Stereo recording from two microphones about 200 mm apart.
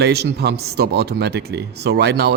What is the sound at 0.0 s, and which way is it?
Speech, 55° right (ahead or behind).